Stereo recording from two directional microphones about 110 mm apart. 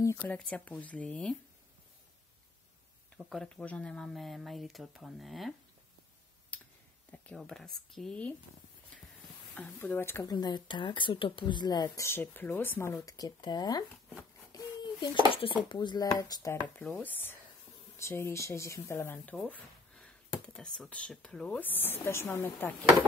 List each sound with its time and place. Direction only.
0.2 s speech: 15° left (ahead or behind)
3.2 s speech: centre (ahead or behind)
6.5 s clicking: 15° left (ahead or behind)
7.3 s speech: 5° left (ahead or behind)
9.8 s speech: 20° left (ahead or behind)
10.2 s a woman's voice: 40° left (ahead or behind); by 13.0 s 20° left (ahead or behind)
13.0 s a woman's voice: 35° left (ahead or behind)
14.5 s a sound: 40° left (ahead or behind)
15.3 s speech: 50° left (ahead or behind)
16.5 s speech: 15° left (ahead or behind)
19.3 s a sound: 10° left (ahead or behind)
20.4 s speech: 5° left (ahead or behind)